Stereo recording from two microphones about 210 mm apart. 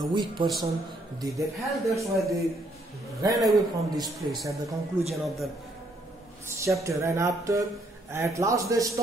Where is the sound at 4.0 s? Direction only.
15° right (ahead or behind).